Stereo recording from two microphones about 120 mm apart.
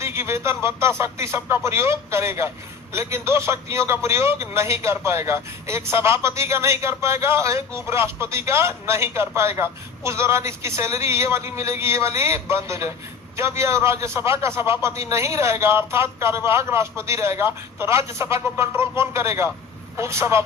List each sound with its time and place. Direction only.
0.0 s a man's voice: 20° right (ahead or behind)